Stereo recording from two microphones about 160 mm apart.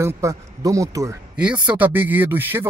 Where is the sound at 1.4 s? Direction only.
5° right (ahead or behind).